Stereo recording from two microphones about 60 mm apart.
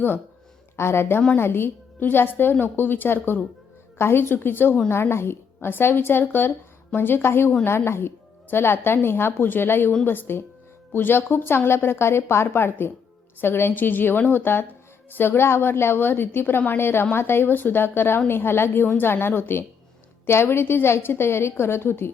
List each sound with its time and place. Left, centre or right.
0.8 s a woman's voice: left